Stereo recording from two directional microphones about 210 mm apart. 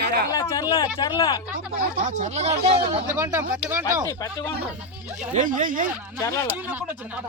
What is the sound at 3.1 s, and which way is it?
Speech, 10° right (ahead or behind).